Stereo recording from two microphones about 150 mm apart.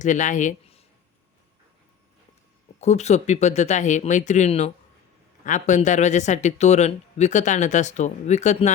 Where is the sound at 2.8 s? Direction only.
50° left (ahead or behind).